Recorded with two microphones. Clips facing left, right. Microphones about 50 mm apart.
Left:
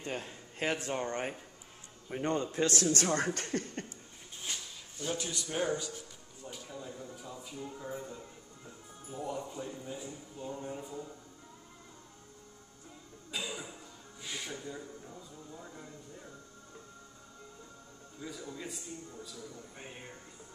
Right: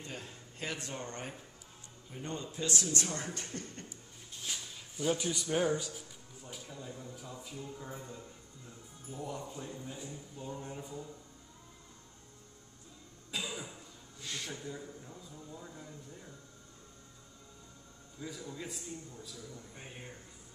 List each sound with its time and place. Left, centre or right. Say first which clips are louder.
0.0 s speech: left 6 dB; left
2.0 s a man's voice: left 9 dB; left
4.5 s a sound: even; centre
5.1 s a man's voice: right 2 dB; centre
13.3 s cough: even; centre
14.2 s speech: left 1 dB; centre
15.0 s speech: left 1 dB; centre
18.2 s speech: even; centre